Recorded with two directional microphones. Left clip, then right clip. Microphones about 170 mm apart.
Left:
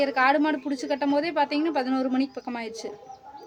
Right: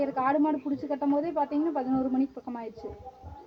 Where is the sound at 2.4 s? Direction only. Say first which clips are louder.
Left 5 dB; 35° left (ahead or behind).